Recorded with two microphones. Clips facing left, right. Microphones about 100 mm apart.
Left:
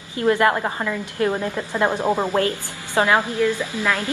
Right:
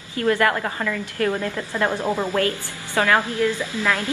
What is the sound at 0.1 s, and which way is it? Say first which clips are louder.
A woman's voice: left 2 dB; 20° left (ahead or behind).